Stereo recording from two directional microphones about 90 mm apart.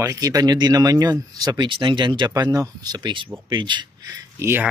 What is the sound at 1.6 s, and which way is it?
Speech, 65° right (ahead or behind).